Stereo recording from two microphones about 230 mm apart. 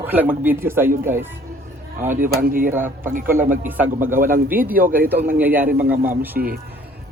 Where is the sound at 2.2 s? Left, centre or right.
Right.